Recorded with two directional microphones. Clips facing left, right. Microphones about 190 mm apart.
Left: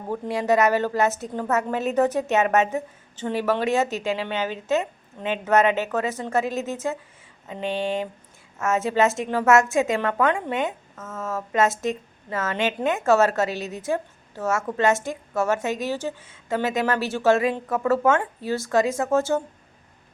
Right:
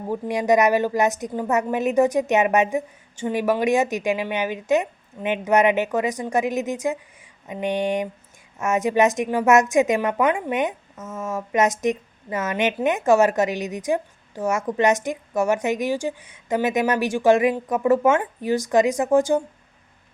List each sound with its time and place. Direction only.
0.1 s a woman's voice: 15° right (ahead or behind)